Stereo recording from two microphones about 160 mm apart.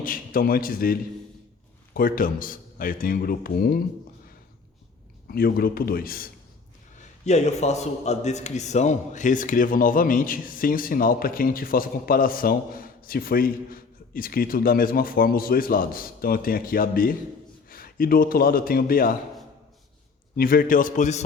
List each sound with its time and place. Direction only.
0.0 s a man's voice: 60° left (ahead or behind)
5.3 s a man's voice: 70° left (ahead or behind)
7.3 s a man's voice: 45° left (ahead or behind); by 19.1 s 65° left (ahead or behind)
20.3 s a man's voice: 65° left (ahead or behind)